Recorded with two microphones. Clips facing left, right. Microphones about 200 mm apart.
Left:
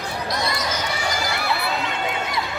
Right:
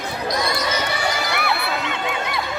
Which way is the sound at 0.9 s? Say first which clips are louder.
Right 2 dB; 65° right (ahead or behind).